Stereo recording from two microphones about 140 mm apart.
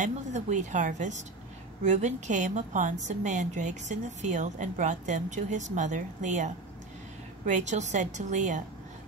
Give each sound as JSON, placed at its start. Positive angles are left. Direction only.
{"t": 0.0, "sound": "a woman's voice", "side_deg": -60}